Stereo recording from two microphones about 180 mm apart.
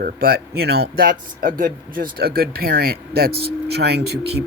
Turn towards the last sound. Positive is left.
turn(degrees=-65)  # may be behind; listen again after turning